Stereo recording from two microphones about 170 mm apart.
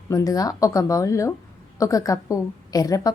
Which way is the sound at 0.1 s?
20° left (ahead or behind).